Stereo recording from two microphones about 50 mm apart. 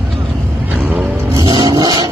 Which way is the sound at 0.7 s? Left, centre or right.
Right.